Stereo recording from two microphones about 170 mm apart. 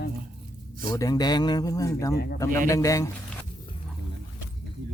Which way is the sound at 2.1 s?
70° left (ahead or behind).